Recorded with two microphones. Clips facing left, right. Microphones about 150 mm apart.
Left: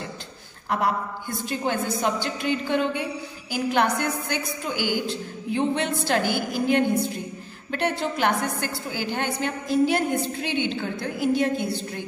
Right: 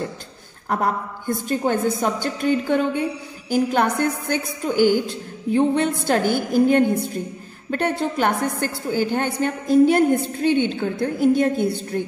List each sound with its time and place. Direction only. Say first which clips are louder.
0.7 s a woman's voice: right 2 dB; 45° right (ahead or behind)